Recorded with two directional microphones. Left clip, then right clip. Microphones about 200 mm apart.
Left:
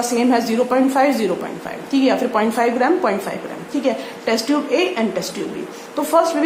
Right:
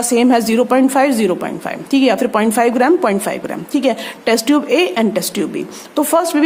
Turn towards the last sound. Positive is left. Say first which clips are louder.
# right 2 dB
turn(degrees=-50)  # may be behind; listen again after turning